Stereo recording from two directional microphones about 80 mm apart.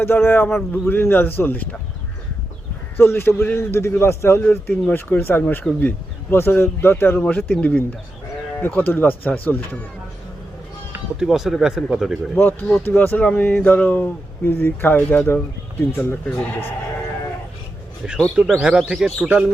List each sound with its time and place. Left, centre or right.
0.0 s speech: left
3.0 s a man's voice: left
11.2 s speech: centre
12.4 s speech: left
18.3 s speech: centre